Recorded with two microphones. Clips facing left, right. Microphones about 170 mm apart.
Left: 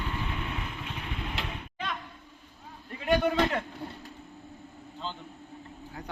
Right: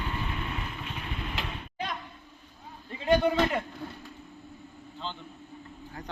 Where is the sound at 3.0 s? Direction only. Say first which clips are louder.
Right 2 dB; 20° right (ahead or behind).